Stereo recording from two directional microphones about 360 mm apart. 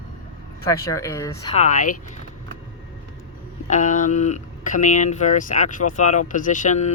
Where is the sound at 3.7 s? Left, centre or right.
Left.